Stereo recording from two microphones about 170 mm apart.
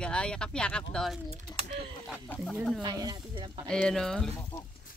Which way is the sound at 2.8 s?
25° right (ahead or behind).